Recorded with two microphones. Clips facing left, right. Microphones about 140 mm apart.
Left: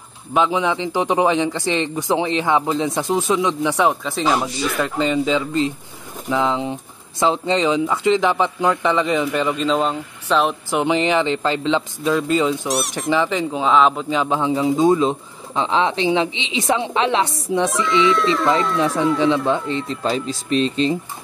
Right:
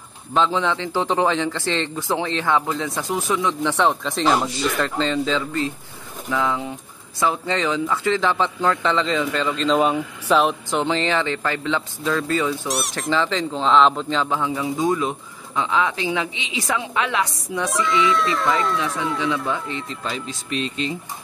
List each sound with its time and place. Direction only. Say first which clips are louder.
0.3 s a man's voice: left 2 dB; 15° left (ahead or behind)
9.7 s speech: right 1 dB; 5° right (ahead or behind)
10.7 s speech: left 3 dB; 15° left (ahead or behind)
12.6 s speech: left 3 dB; centre (ahead or behind)
13.1 s speech: left 3 dB; 15° left (ahead or behind)
17.6 s speech: left 1 dB; centre (ahead or behind)
19.1 s speech: left 6 dB; 25° left (ahead or behind)